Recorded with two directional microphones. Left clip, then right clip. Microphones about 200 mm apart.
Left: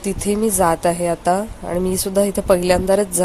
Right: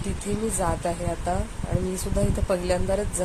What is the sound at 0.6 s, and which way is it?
Speech, 50° left (ahead or behind).